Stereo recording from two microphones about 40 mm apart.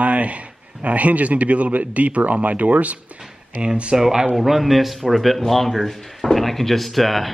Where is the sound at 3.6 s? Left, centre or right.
Right; by 7.3 s centre.